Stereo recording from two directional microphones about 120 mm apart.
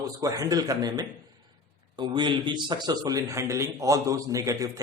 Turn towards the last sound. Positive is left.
turn(degrees=-25)  # may be behind; listen again after turning